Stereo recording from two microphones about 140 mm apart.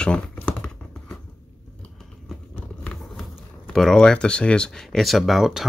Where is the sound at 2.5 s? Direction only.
5° left (ahead or behind).